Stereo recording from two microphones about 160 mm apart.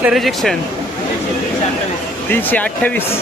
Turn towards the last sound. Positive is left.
turn(degrees=10)  # may be behind; listen again after turning